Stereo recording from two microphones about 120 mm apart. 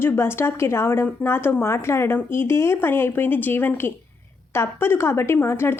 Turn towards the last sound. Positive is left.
turn(degrees=20)  # may be behind; listen again after turning